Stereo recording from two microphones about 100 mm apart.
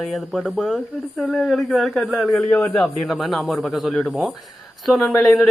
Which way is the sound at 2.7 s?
5° left (ahead or behind).